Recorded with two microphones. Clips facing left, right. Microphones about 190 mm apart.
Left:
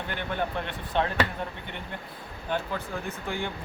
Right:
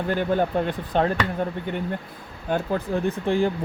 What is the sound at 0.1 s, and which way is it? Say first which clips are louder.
Speech: right 9 dB; 40° right (ahead or behind).